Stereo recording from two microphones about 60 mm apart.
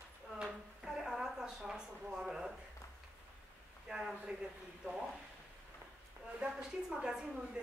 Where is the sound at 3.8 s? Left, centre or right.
Centre.